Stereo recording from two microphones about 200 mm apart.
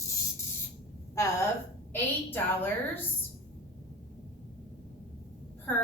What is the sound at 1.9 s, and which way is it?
A woman's voice, 10° left (ahead or behind).